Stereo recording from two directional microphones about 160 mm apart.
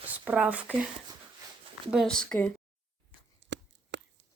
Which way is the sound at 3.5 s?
90° right.